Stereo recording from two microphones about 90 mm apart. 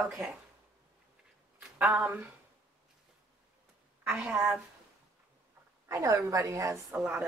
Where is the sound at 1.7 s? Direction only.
15° right (ahead or behind).